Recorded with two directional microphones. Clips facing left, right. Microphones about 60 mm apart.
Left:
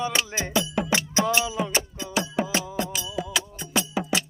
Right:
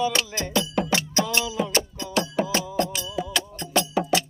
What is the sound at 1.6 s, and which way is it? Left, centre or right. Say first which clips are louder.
Music: right 2 dB; centre.